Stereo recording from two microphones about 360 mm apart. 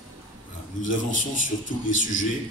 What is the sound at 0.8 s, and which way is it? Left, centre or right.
A woman's voice, left.